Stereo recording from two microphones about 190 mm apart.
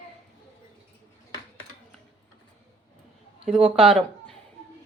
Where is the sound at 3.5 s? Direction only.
30° right (ahead or behind).